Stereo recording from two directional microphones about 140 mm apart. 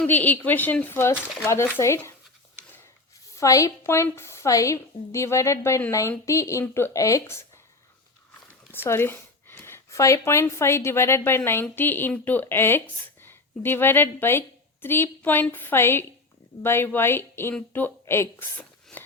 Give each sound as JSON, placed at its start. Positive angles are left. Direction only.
{"t": 0.0, "sound": "speech", "side_deg": 10}
{"t": 1.1, "sound": "speech", "side_deg": 0}
{"t": 1.5, "sound": "a woman's voice", "side_deg": 15}
{"t": 3.3, "sound": "a woman's voice", "side_deg": 25}
{"t": 8.7, "sound": "a woman's voice", "side_deg": 15}